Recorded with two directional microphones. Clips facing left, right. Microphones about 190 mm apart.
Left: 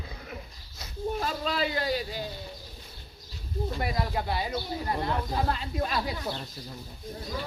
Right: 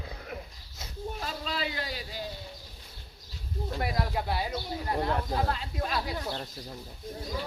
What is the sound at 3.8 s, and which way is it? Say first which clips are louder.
Speech: right 1 dB; 5° right (ahead or behind).